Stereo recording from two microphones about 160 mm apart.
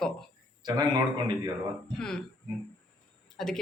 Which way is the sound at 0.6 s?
25° right (ahead or behind).